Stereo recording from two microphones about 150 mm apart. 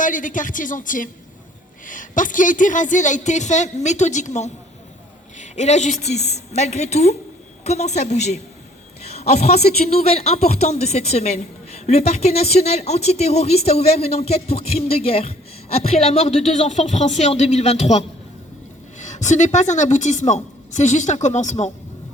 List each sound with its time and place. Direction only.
0.0 s a woman's voice: 60° left (ahead or behind)